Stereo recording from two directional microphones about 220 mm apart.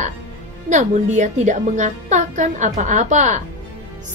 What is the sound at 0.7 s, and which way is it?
A woman's voice, 35° right (ahead or behind).